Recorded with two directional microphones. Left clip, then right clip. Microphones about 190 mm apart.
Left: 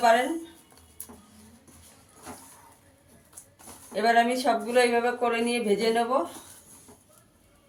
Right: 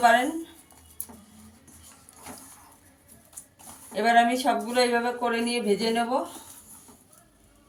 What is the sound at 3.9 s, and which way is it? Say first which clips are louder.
Speech: right 1 dB; 35° left (ahead or behind).